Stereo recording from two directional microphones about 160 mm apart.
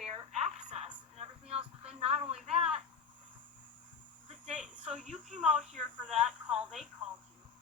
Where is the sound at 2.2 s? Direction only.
40° right (ahead or behind).